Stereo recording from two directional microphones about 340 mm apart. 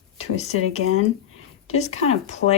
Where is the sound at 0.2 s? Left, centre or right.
Centre.